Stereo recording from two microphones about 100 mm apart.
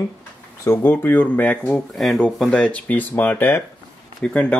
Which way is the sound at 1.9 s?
Centre (ahead or behind).